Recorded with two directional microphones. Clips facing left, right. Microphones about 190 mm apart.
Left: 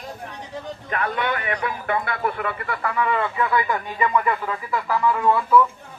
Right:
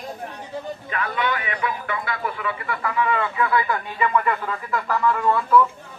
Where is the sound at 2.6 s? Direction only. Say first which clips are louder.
Right 1 dB; 35° left (ahead or behind).